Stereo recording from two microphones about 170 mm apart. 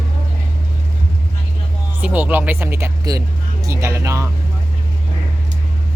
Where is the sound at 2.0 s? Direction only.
10° right (ahead or behind).